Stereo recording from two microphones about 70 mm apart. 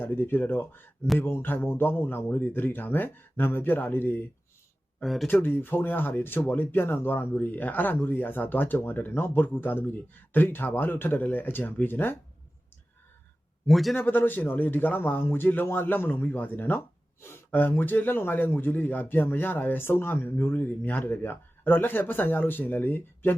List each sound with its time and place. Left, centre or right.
0.0 s a man's voice: left
5.0 s speech: centre
5.3 s a man's voice: left
13.7 s speech: centre
13.9 s a man's voice: left